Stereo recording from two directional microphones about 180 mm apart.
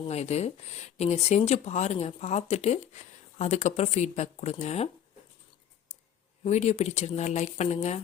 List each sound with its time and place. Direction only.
0.1 s speech: 35° left (ahead or behind)
6.4 s speech: 40° left (ahead or behind)